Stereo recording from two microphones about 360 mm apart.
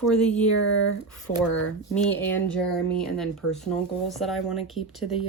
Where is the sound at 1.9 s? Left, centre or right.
Centre.